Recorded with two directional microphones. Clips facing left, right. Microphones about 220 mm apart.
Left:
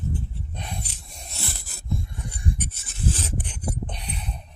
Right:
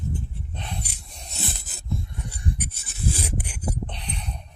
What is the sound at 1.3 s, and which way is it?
Filing, 20° right (ahead or behind).